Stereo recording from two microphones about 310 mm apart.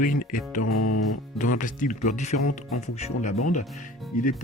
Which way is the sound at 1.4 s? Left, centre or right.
Left.